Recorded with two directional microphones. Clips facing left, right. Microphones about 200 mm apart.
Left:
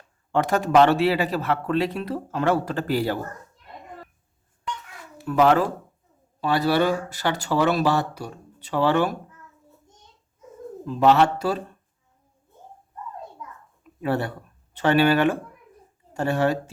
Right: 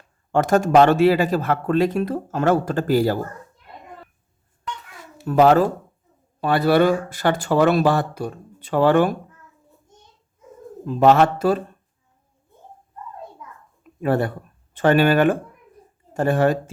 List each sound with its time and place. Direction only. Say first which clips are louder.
0.3 s speech: right 4 dB; 45° right (ahead or behind)
5.2 s speech: right 4 dB; 40° right (ahead or behind)
6.4 s speech: right 4 dB; 55° right (ahead or behind)
10.8 s speech: right 3 dB; 50° right (ahead or behind)
14.0 s speech: right 4 dB; 50° right (ahead or behind)